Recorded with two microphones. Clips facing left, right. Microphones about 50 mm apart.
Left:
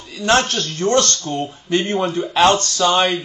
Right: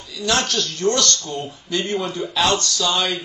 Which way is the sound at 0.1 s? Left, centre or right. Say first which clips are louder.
Left 5 dB; left.